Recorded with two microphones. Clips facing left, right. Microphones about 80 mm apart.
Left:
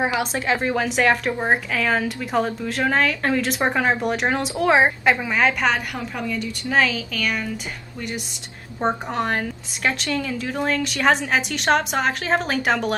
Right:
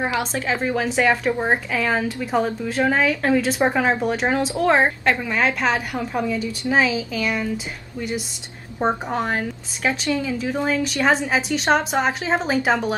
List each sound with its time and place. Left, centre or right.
0.0 s a woman's voice: centre
5.4 s speech: centre
6.1 s speech: right
8.8 s speech: centre